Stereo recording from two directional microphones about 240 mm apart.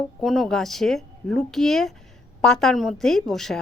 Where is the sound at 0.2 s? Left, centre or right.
Centre.